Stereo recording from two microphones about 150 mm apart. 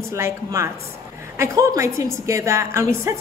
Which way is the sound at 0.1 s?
20° right (ahead or behind).